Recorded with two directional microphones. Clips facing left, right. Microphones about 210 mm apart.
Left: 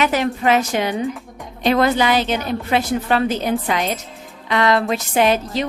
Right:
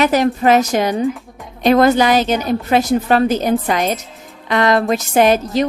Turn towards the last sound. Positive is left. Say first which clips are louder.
# right 4 dB
turn(degrees=-45)  # may be behind; listen again after turning